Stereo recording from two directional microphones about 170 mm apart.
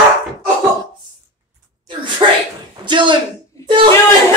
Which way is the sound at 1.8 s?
25° right (ahead or behind).